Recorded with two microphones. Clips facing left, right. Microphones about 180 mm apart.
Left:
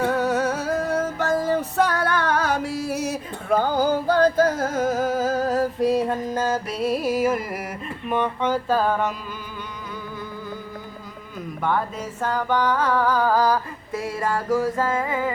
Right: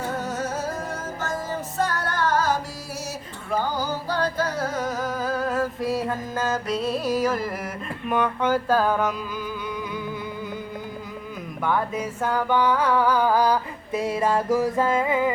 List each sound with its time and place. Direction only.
0.0 s music: 65° left (ahead or behind); by 5.6 s 40° left (ahead or behind)
5.9 s music: 30° left (ahead or behind)
6.7 s music: 10° left (ahead or behind)
8.1 s a sound: 5° right (ahead or behind)
11.6 s music: 10° right (ahead or behind)